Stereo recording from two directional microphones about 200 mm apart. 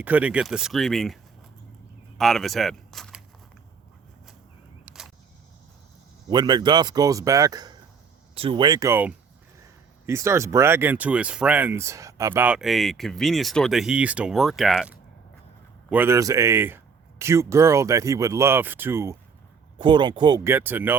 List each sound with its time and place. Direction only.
0.0 s speech: 5° right (ahead or behind)
6.3 s speech: 20° right (ahead or behind)
19.8 s speech: 25° right (ahead or behind)